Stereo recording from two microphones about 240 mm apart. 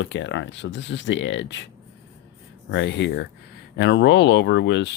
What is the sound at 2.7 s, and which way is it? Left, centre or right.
Speech, left.